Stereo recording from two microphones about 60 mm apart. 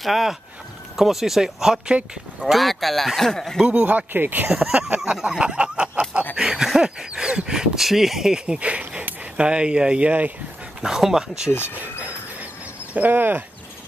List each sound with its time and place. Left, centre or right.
0.0 s speech: centre
2.4 s speech: centre
3.8 s speech: right
4.5 s speech: centre
5.1 s a sound: centre
6.3 s speech: centre
10.8 s speech: centre
12.9 s speech: right